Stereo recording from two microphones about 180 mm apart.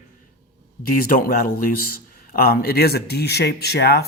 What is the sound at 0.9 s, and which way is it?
A man's voice, 55° left (ahead or behind).